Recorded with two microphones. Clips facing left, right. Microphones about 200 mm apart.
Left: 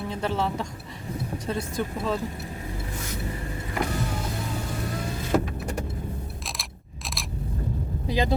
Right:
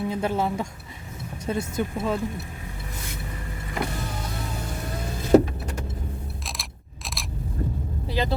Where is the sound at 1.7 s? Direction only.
10° right (ahead or behind).